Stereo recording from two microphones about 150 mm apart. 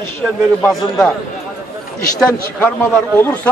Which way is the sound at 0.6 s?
5° left (ahead or behind).